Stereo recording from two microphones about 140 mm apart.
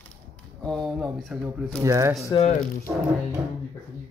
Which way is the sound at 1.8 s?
20° right (ahead or behind).